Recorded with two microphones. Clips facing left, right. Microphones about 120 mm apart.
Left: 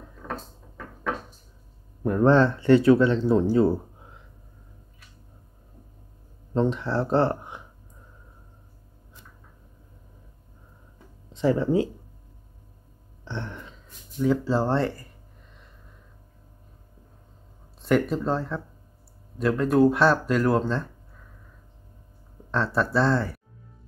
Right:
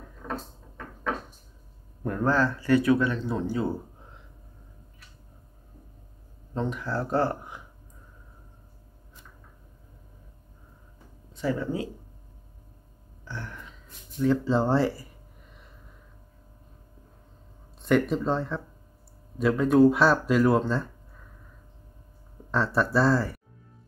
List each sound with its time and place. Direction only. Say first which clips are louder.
2.0 s speech: left 6 dB; 25° left (ahead or behind)
6.5 s speech: left 6 dB; 30° left (ahead or behind)
11.3 s speech: left 7 dB; 25° left (ahead or behind)
13.2 s a sound: left 4 dB; 25° left (ahead or behind)
14.1 s speech: even; 10° left (ahead or behind)
17.8 s speech: even; centre (ahead or behind)
22.5 s speech: even; centre (ahead or behind)